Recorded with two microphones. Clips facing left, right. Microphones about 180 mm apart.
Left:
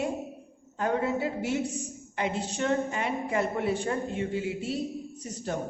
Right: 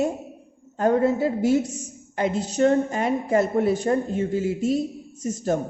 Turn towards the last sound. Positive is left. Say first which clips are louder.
# right 9 dB
turn(degrees=-45)  # may be behind; listen again after turning